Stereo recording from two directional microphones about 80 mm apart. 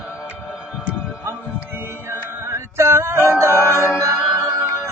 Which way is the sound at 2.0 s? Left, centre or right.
Right.